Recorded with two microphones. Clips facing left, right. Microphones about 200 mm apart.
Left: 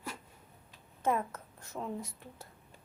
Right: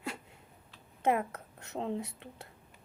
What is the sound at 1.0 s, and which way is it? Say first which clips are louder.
A woman's voice: right 2 dB; 65° right (ahead or behind).